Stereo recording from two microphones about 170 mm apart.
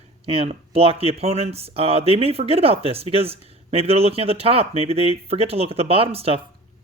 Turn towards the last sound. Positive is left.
turn(degrees=-35)  # may be behind; listen again after turning